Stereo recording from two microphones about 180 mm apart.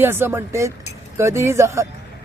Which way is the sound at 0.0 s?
10° right (ahead or behind).